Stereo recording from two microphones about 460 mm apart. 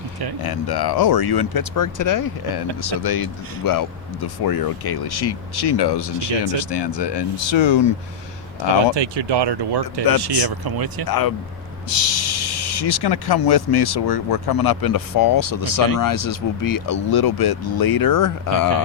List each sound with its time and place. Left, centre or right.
0.4 s speech: left
9.0 s speech: right
11.0 s speech: left